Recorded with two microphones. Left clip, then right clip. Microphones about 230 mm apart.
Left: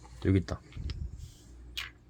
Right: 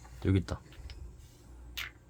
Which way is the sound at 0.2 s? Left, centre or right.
Centre.